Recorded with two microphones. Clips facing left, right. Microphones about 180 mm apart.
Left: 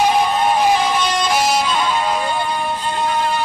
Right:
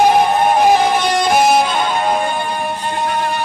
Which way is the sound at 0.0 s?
55° right (ahead or behind).